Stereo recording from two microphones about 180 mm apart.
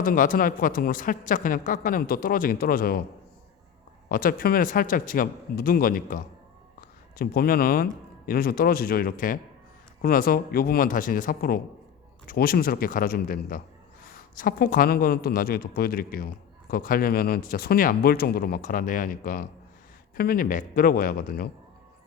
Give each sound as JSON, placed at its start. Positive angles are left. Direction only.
{"t": 0.0, "sound": "a man's voice", "side_deg": 50}
{"t": 4.1, "sound": "a man's voice", "side_deg": 55}